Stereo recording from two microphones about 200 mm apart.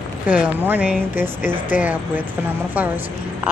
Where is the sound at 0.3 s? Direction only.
10° right (ahead or behind).